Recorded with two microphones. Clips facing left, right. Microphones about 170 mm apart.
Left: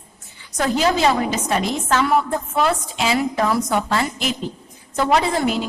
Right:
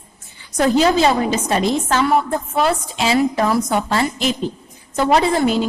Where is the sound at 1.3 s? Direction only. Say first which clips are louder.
Right 4 dB; 30° right (ahead or behind).